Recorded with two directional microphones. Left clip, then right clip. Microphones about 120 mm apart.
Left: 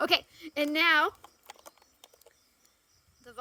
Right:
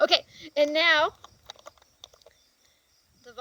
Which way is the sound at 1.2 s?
5° left (ahead or behind).